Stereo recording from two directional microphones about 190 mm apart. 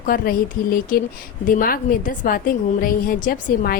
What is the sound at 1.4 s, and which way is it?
A woman's voice, 45° left (ahead or behind).